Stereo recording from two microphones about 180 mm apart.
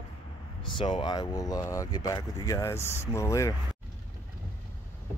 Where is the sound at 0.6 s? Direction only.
25° left (ahead or behind).